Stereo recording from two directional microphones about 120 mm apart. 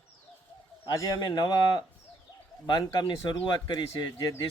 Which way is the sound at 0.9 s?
35° left (ahead or behind).